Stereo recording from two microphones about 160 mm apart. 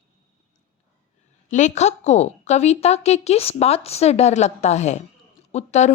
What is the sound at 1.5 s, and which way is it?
A woman's voice, 45° left (ahead or behind).